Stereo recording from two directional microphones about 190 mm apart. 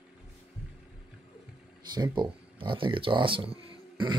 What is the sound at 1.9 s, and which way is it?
Speech, 25° right (ahead or behind).